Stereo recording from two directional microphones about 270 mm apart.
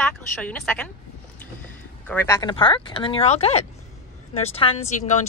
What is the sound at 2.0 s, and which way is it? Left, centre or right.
Speech, centre.